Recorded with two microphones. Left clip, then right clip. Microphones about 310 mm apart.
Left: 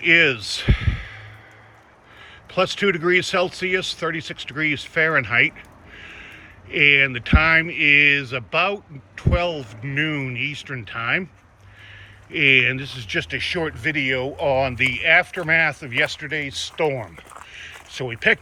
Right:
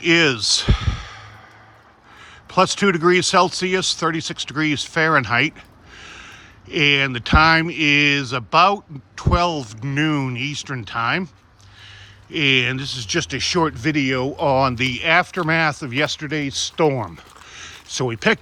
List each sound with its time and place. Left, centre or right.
0.0 s speech: centre
2.5 s speech: centre
12.3 s speech: centre
17.4 s a sound: centre